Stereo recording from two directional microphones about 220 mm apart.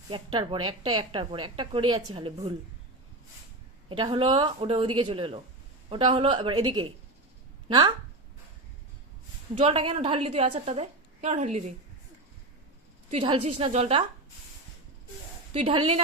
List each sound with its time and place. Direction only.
0.1 s a woman's voice: 20° right (ahead or behind)
3.8 s a woman's voice: 20° right (ahead or behind)
9.6 s a woman's voice: 25° right (ahead or behind)
13.1 s a woman's voice: 25° right (ahead or behind)
15.5 s a woman's voice: 25° right (ahead or behind)